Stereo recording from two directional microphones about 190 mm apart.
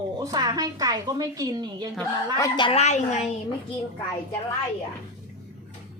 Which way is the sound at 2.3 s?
20° left (ahead or behind).